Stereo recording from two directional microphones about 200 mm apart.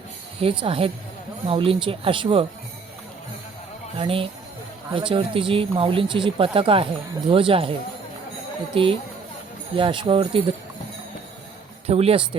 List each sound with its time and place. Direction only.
0.3 s speech: 25° right (ahead or behind)
3.9 s speech: 25° right (ahead or behind)
11.9 s speech: 30° right (ahead or behind)